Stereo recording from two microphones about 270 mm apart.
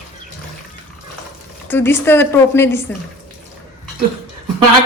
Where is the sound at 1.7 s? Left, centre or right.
Centre.